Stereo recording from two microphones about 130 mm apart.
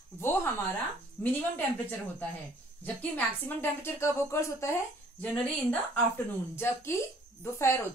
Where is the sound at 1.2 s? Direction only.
10° left (ahead or behind).